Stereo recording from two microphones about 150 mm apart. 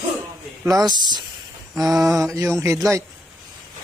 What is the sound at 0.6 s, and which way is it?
Speech, 25° right (ahead or behind).